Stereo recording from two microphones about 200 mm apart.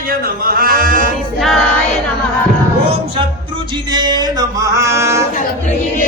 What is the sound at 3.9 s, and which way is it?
Music, 20° right (ahead or behind).